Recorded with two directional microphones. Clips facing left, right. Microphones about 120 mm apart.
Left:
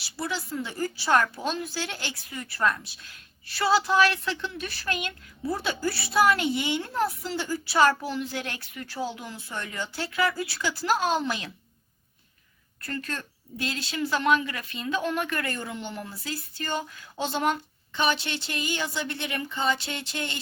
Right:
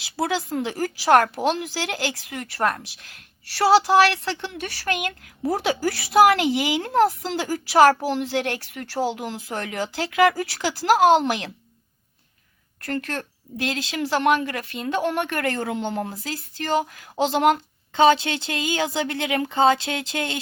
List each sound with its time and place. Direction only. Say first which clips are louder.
0.3 s speech: right 4 dB; 90° right; by 5.3 s 70° right (ahead or behind)
5.5 s speech: right 6 dB; 90° right
8.0 s speech: right 7 dB; 75° right (ahead or behind)
12.8 s speech: right 6 dB; 75° right (ahead or behind)